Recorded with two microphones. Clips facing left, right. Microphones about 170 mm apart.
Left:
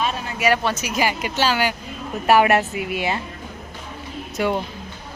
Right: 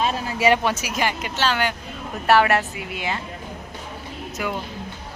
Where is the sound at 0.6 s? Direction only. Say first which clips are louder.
Even; 10° right (ahead or behind).